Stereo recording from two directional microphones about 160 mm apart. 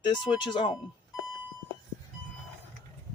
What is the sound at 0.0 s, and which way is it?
Speech, 30° left (ahead or behind).